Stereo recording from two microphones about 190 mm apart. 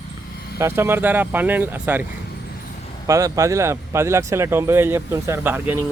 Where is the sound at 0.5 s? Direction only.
15° right (ahead or behind).